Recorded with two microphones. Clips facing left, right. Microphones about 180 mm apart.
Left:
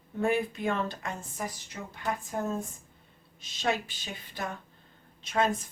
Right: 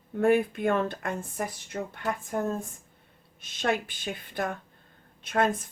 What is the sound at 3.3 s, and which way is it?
A woman's voice, 55° right (ahead or behind).